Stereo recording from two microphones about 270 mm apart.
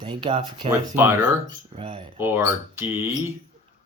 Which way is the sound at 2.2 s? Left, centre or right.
Centre.